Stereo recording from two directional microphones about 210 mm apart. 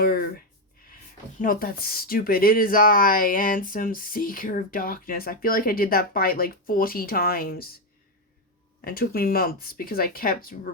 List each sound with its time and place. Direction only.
0.0 s a sound: 45° left (ahead or behind)
1.4 s speech: 40° left (ahead or behind)
8.8 s speech: 45° left (ahead or behind)